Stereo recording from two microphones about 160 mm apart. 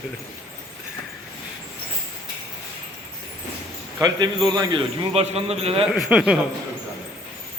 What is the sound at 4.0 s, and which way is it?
Speech, 25° right (ahead or behind).